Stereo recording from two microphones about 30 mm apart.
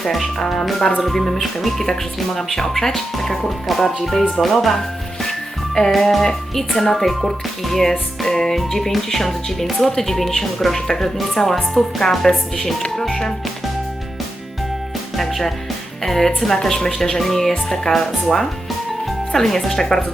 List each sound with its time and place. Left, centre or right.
0.1 s speech: centre
5.9 s speech: centre
15.1 s speech: centre